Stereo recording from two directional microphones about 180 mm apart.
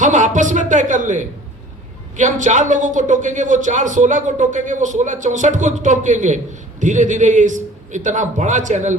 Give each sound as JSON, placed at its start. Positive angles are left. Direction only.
{"t": 0.0, "sound": "speech", "side_deg": -45}